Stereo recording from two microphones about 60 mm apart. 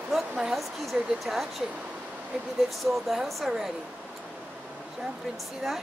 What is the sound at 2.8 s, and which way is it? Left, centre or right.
Speech, centre.